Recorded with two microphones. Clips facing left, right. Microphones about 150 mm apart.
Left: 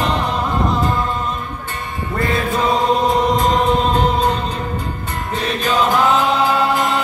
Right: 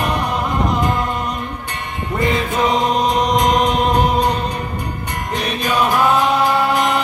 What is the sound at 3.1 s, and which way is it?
Chant, 15° right (ahead or behind).